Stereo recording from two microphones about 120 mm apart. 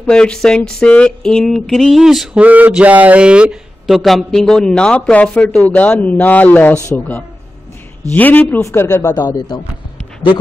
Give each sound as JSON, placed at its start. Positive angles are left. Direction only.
{"t": 0.0, "sound": "a sound", "side_deg": 5}
{"t": 8.1, "sound": "speech", "side_deg": 15}
{"t": 9.1, "sound": "a man's voice", "side_deg": 35}